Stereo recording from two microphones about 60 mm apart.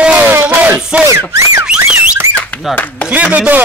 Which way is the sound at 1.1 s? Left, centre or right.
Right.